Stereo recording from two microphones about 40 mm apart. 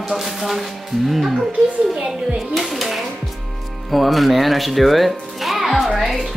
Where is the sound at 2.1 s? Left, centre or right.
Centre.